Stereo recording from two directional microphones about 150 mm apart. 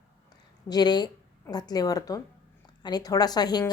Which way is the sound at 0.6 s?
30° left (ahead or behind).